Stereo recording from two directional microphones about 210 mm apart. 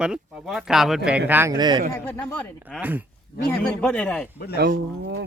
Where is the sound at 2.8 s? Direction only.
10° right (ahead or behind).